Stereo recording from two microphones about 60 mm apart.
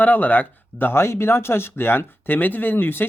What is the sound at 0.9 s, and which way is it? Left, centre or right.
Speech, left.